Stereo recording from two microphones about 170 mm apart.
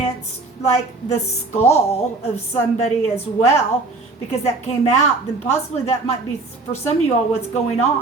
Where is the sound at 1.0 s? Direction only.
40° left (ahead or behind).